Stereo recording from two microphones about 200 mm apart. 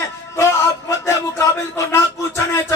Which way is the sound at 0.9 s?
15° left (ahead or behind).